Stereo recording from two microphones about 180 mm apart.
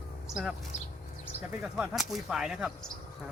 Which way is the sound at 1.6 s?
5° right (ahead or behind).